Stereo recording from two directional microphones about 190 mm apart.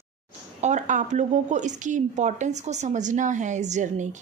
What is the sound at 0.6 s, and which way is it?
Speech, 40° right (ahead or behind).